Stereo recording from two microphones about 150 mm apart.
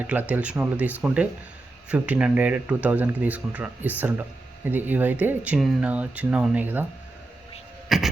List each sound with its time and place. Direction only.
0.0 s speech: 10° right (ahead or behind)
7.9 s throat clearing: centre (ahead or behind)